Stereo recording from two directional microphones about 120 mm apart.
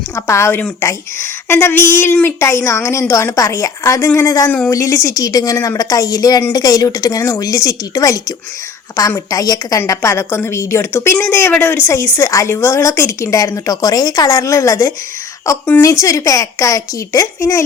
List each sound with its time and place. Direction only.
0.2 s a woman's voice: 20° left (ahead or behind)